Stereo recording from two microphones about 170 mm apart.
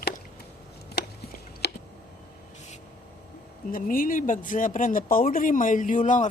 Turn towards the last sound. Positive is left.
turn(degrees=50)  # may be behind; listen again after turning